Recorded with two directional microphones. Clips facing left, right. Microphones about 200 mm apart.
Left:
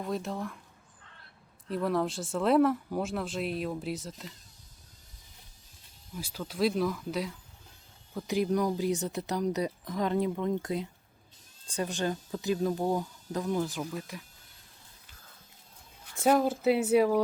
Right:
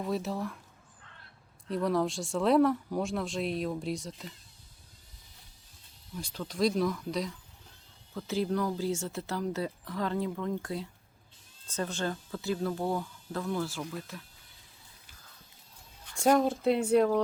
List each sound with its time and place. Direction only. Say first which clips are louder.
0.0 s speech: right 1 dB; centre (ahead or behind)
1.7 s speech: right 1 dB; centre (ahead or behind)
6.1 s speech: even; 5° left (ahead or behind)
8.1 s speech: left 2 dB; 15° left (ahead or behind)
16.1 s speech: even; 5° left (ahead or behind)